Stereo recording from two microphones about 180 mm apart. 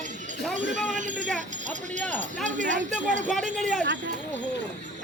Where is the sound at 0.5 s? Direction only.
45° right (ahead or behind).